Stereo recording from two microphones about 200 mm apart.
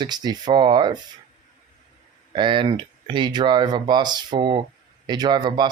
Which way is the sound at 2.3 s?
25° right (ahead or behind).